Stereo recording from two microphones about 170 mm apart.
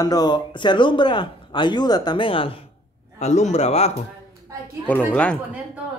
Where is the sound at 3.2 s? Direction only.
40° left (ahead or behind).